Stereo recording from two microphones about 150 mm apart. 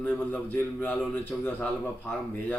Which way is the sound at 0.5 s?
10° left (ahead or behind).